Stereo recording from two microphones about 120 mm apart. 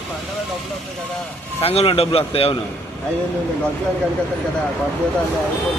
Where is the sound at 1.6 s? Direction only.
55° left (ahead or behind).